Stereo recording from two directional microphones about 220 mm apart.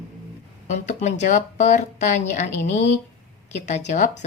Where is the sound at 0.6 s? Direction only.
30° left (ahead or behind).